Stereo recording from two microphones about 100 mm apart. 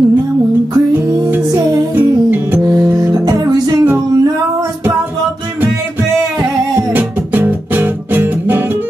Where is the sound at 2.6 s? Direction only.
35° right (ahead or behind).